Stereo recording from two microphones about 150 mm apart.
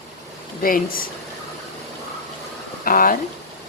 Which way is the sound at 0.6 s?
70° left (ahead or behind).